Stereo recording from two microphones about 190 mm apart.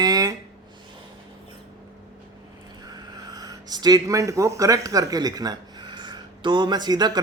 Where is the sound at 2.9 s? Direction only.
20° right (ahead or behind).